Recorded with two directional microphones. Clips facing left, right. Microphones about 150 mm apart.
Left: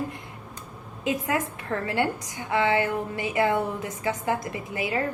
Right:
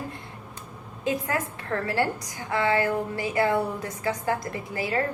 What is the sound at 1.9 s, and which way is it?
A woman's voice, 20° left (ahead or behind).